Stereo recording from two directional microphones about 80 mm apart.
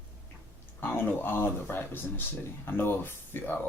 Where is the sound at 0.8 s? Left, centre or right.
Left.